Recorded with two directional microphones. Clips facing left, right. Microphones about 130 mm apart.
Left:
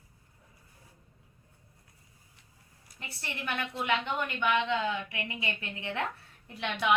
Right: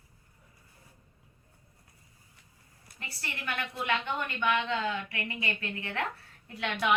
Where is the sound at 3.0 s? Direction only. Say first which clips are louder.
Left 1 dB; 15° left (ahead or behind).